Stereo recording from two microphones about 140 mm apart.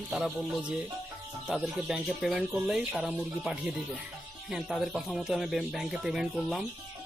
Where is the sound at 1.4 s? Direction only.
Centre (ahead or behind).